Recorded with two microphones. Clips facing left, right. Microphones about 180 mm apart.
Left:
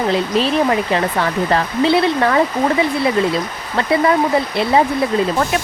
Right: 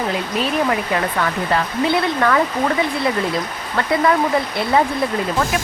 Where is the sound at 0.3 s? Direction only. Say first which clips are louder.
Left 2 dB; 25° left (ahead or behind).